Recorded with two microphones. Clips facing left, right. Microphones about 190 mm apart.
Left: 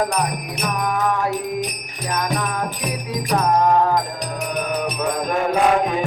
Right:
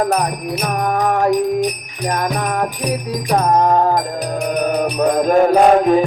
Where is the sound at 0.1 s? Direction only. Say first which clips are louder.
Right 5 dB; 45° right (ahead or behind).